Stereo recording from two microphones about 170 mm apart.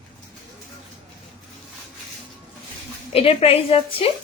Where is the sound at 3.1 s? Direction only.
35° left (ahead or behind).